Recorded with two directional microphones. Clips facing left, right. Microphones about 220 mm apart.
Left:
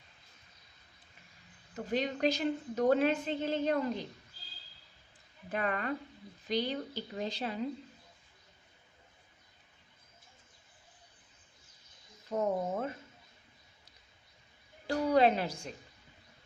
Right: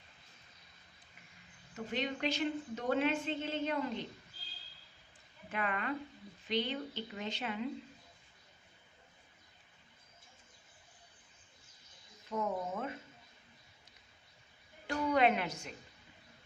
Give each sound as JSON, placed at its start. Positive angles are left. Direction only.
{"t": 1.7, "sound": "a woman's voice", "side_deg": 40}
{"t": 5.5, "sound": "a woman's voice", "side_deg": 40}
{"t": 12.3, "sound": "a woman's voice", "side_deg": 35}
{"t": 14.8, "sound": "a woman's voice", "side_deg": 35}